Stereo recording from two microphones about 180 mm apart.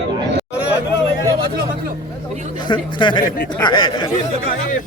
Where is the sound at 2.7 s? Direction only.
25° left (ahead or behind).